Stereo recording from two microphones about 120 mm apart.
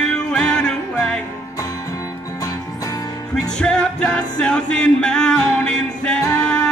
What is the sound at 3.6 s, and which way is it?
Music, 10° left (ahead or behind).